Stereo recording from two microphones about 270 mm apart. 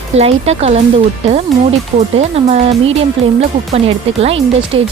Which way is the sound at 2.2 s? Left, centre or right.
Right.